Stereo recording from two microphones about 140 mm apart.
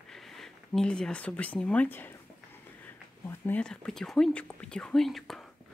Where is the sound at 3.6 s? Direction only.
5° left (ahead or behind).